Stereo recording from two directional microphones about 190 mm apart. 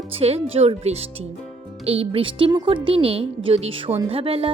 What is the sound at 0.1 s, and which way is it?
A woman's voice, 30° right (ahead or behind).